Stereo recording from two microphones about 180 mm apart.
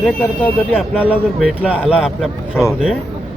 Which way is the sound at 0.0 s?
10° left (ahead or behind).